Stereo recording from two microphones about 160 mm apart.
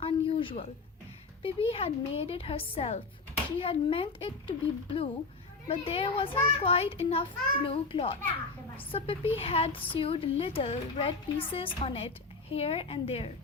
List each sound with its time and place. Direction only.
0.0 s a sound: 35° left (ahead or behind)
1.4 s speech: 35° left (ahead or behind)
5.6 s speech: 35° left (ahead or behind)